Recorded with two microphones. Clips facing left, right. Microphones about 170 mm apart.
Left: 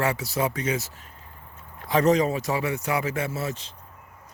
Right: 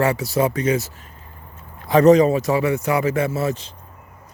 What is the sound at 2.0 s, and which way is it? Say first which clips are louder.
Speech: right 9 dB; 45° right (ahead or behind).